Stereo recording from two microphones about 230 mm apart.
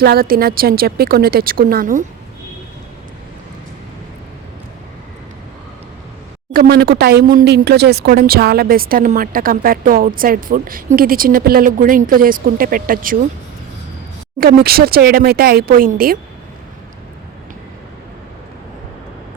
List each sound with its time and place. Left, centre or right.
0.0 s speech: right
6.5 s speech: right
14.3 s speech: right